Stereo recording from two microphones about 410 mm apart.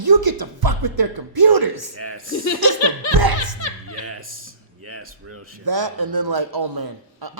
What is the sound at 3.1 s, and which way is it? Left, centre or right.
Speech, right.